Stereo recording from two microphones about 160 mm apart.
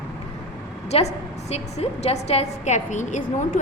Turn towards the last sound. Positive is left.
turn(degrees=50)  # may be behind; listen again after turning